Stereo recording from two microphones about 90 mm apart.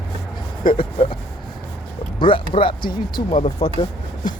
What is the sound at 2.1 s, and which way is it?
Speech, 70° left (ahead or behind).